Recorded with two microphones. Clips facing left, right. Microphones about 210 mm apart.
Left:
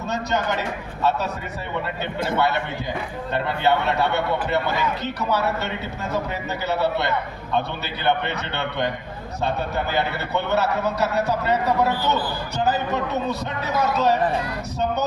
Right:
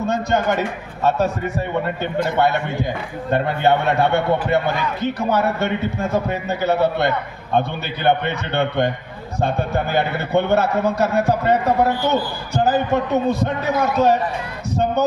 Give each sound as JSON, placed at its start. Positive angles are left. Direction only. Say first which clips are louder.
{"t": 0.1, "sound": "a man's voice", "louder": "right 3 dB", "side_deg": -50}